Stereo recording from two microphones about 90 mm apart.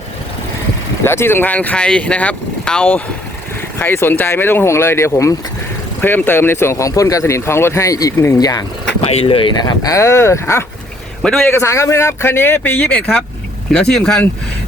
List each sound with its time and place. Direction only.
1.0 s speech: 25° left (ahead or behind)
3.8 s speech: 25° left (ahead or behind); by 8.6 s 45° left (ahead or behind)
9.0 s speech: 80° left
9.6 s speech: 40° left (ahead or behind)
11.2 s a man's voice: 5° left (ahead or behind)
11.4 s speech: 30° left (ahead or behind)
12.9 s speech: 10° left (ahead or behind)